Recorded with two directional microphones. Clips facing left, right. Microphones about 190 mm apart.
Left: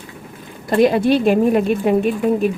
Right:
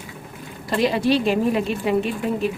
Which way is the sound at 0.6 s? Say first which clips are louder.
Left 6 dB; 50° left (ahead or behind).